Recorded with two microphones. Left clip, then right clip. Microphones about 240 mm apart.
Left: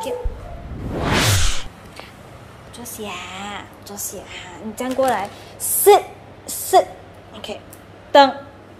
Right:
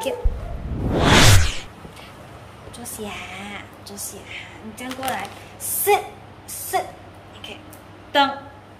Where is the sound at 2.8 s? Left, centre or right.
Centre.